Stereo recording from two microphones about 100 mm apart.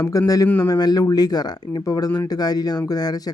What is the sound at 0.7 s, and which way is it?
Speech, 40° left (ahead or behind).